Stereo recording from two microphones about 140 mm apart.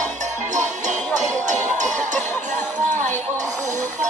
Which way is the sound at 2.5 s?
60° right (ahead or behind).